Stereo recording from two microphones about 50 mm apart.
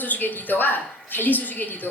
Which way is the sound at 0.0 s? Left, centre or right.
Left.